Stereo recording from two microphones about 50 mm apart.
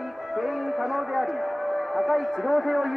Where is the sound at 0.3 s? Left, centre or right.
Centre.